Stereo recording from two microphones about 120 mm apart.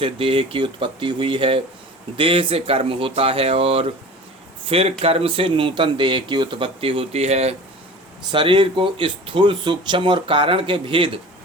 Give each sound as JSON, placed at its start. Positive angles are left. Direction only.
{"t": 0.0, "sound": "speech", "side_deg": -45}
{"t": 8.3, "sound": "speech", "side_deg": -40}